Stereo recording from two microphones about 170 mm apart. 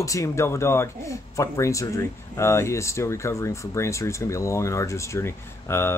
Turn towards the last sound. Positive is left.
turn(degrees=15)  # may be behind; listen again after turning